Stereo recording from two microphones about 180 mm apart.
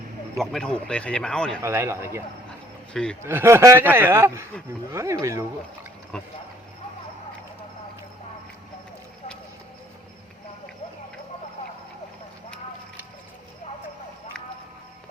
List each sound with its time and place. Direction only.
0.3 s speech: 5° left (ahead or behind)
1.6 s a man's voice: 15° right (ahead or behind)
2.9 s speech: 5° left (ahead or behind)
3.2 s a man's voice: 15° right (ahead or behind)
6.1 s speech: 5° left (ahead or behind)